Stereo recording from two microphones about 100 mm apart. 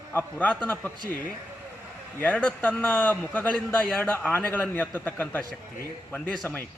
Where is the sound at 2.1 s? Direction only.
15° left (ahead or behind).